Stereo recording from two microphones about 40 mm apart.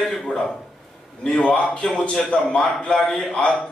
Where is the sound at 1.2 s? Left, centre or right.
Left.